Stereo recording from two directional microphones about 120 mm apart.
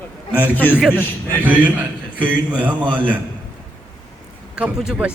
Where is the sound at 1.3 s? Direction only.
15° right (ahead or behind).